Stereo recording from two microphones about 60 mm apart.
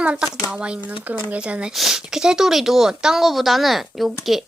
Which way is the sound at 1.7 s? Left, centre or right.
Centre.